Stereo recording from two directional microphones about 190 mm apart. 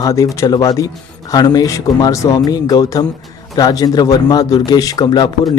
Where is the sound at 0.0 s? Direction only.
15° left (ahead or behind).